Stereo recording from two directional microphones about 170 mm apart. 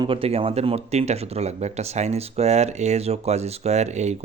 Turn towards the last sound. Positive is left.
turn(degrees=-40)  # may be behind; listen again after turning